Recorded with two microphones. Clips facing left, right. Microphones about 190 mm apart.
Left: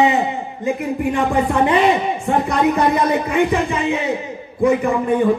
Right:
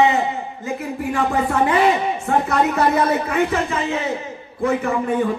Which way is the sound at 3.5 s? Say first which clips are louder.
Left 3 dB; 15° left (ahead or behind).